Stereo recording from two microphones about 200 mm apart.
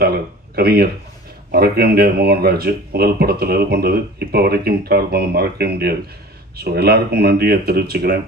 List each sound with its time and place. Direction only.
0.6 s speech: 50° right (ahead or behind)